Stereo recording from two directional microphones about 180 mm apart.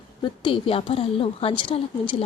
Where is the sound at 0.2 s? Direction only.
30° left (ahead or behind).